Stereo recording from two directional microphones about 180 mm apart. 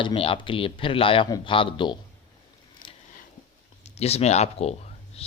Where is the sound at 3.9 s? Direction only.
35° left (ahead or behind).